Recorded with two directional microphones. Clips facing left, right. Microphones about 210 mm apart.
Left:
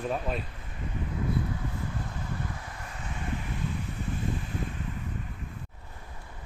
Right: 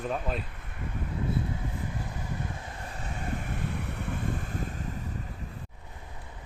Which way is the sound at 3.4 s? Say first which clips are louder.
Even; 65° right (ahead or behind).